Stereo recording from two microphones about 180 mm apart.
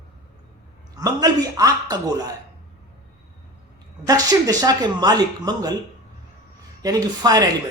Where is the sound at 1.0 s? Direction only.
20° right (ahead or behind).